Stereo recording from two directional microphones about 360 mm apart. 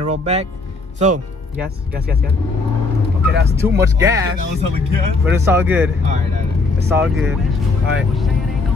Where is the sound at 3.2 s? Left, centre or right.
Right.